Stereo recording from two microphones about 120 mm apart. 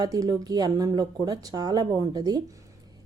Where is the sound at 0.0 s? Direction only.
30° right (ahead or behind).